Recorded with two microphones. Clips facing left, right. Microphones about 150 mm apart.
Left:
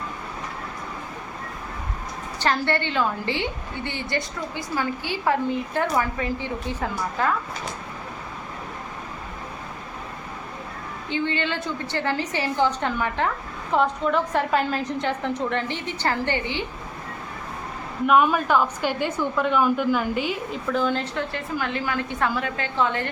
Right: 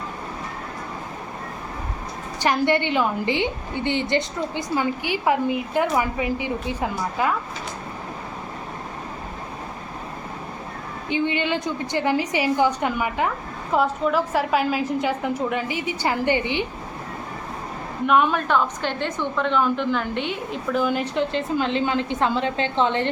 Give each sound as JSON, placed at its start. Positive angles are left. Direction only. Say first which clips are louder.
{"t": 2.4, "sound": "a woman's voice", "louder": "right 3 dB", "side_deg": -15}
{"t": 11.1, "sound": "a woman's voice", "louder": "right 3 dB", "side_deg": -15}
{"t": 18.0, "sound": "a woman's voice", "louder": "left 1 dB", "side_deg": 5}